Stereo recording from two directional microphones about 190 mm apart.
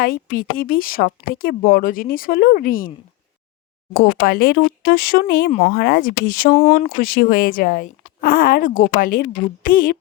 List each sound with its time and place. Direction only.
0.0 s speech: 50° left (ahead or behind)
3.9 s speech: 50° left (ahead or behind)
5.5 s speech: 35° left (ahead or behind)
5.7 s speech: 50° left (ahead or behind)